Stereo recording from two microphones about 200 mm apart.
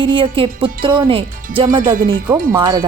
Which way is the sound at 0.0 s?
25° right (ahead or behind).